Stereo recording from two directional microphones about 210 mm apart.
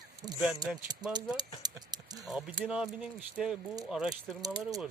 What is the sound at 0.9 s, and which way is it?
Speech, 20° right (ahead or behind).